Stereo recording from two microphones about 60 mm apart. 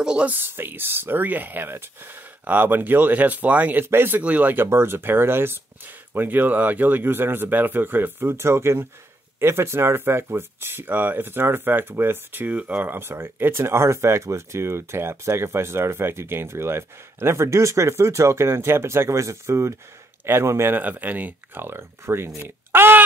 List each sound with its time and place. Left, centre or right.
0.0 s speech: centre
0.3 s speech: right
3.8 s speech: right
4.2 s speech: right
4.6 s speech: right
13.0 s speech: right
20.7 s speech: right
21.6 s speech: right
22.7 s a sound: right